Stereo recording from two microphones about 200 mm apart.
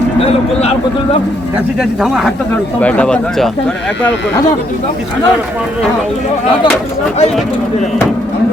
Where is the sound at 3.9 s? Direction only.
60° left (ahead or behind).